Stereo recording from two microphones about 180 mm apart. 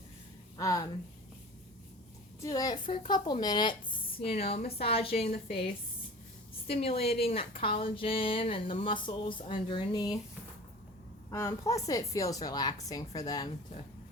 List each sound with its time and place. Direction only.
0.5 s speech: 20° left (ahead or behind)
2.4 s a woman's voice: 20° left (ahead or behind)
6.7 s a woman's voice: 35° left (ahead or behind)
11.3 s speech: 20° left (ahead or behind)